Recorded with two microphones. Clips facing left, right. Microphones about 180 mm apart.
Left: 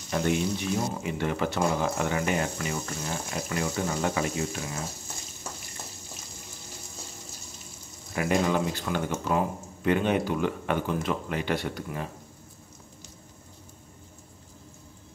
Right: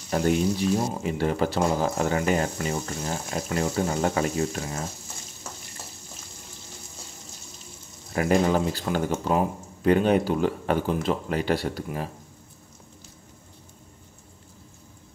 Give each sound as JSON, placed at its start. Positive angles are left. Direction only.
{"t": 0.1, "sound": "speech", "side_deg": -35}
{"t": 8.1, "sound": "speech", "side_deg": -35}